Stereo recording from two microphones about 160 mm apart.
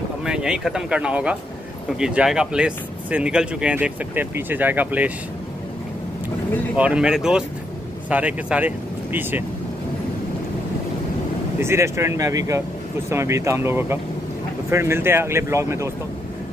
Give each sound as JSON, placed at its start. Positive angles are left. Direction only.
{"t": 0.2, "sound": "speech", "side_deg": -5}
{"t": 6.8, "sound": "speech", "side_deg": -5}
{"t": 11.6, "sound": "speech", "side_deg": -15}